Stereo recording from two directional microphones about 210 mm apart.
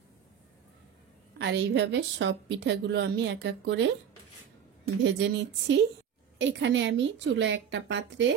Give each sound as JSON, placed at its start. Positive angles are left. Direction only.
{"t": 1.4, "sound": "a woman's voice", "side_deg": -55}
{"t": 5.0, "sound": "a woman's voice", "side_deg": -60}